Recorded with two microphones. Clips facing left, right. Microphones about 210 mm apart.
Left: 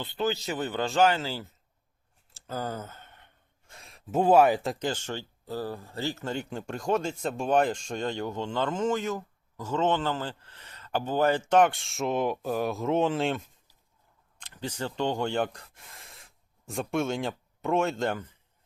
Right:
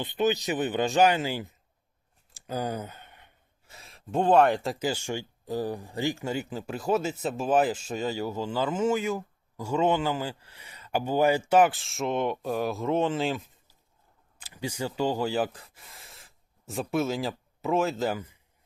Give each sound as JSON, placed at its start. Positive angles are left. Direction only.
{"t": 0.0, "sound": "speech", "side_deg": -20}